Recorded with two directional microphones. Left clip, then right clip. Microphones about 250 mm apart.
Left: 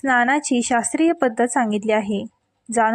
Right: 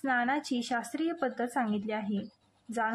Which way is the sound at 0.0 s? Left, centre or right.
Left.